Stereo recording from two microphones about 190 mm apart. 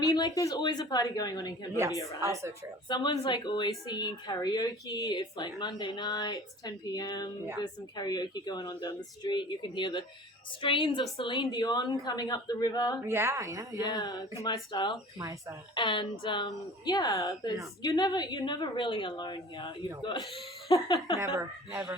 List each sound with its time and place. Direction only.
0.0 s a woman's voice: 20° left (ahead or behind)
1.7 s a woman's voice: 15° right (ahead or behind)
2.9 s a woman's voice: 25° left (ahead or behind)
13.1 s a woman's voice: 15° right (ahead or behind)
13.8 s a woman's voice: 20° left (ahead or behind)
15.2 s a woman's voice: 20° right (ahead or behind)
15.7 s a woman's voice: 25° left (ahead or behind)
21.2 s a woman's voice: 15° right (ahead or behind)